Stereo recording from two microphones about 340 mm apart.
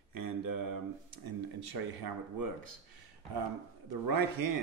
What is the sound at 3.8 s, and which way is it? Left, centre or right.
Speech, right.